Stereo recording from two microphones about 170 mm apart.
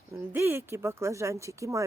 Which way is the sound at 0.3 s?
15° right (ahead or behind).